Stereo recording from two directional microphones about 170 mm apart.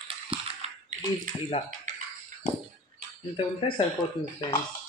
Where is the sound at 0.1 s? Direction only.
35° right (ahead or behind).